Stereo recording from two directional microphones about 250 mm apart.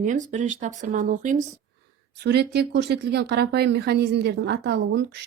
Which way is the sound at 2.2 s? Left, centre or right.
Right.